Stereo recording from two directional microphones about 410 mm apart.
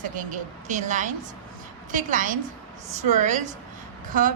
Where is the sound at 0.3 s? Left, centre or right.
Centre.